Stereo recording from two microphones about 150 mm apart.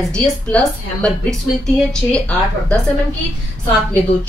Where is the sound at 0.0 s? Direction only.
5° left (ahead or behind).